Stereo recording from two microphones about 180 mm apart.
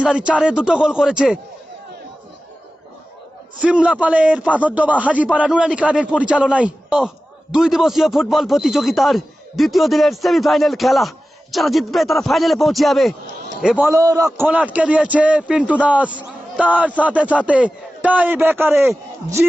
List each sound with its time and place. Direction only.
0.0 s a man's voice: 5° right (ahead or behind)
3.6 s a man's voice: 5° right (ahead or behind)
13.9 s a man's voice: 20° right (ahead or behind)
14.3 s a man's voice: 5° right (ahead or behind)